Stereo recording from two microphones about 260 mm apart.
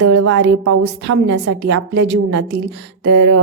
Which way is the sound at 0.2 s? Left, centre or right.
Right.